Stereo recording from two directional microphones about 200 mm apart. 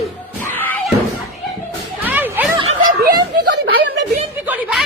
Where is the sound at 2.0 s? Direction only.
10° right (ahead or behind).